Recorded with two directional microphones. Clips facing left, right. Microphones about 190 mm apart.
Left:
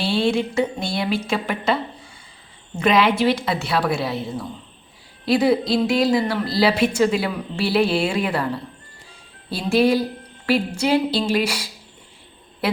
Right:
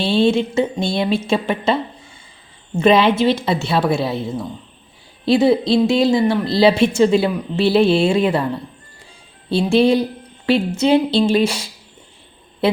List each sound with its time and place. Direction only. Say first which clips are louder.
0.0 s speech: right 4 dB; 25° right (ahead or behind)
9.5 s speech: right 4 dB; 25° right (ahead or behind)